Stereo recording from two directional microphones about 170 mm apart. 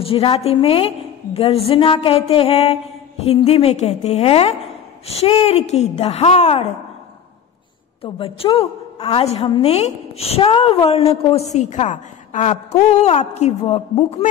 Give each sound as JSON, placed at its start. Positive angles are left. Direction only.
{"t": 0.0, "sound": "a woman's voice", "side_deg": 35}
{"t": 8.0, "sound": "a woman's voice", "side_deg": 35}